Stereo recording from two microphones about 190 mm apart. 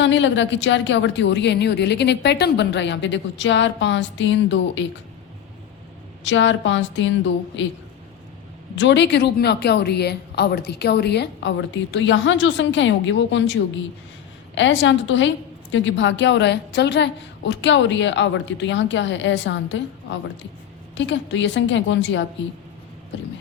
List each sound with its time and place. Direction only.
0.0 s a woman's voice: 75° left (ahead or behind)
6.2 s a woman's voice: 75° left (ahead or behind)
8.7 s a woman's voice: 70° left (ahead or behind)
14.5 s a woman's voice: 75° left (ahead or behind)
20.9 s a woman's voice: 75° left (ahead or behind)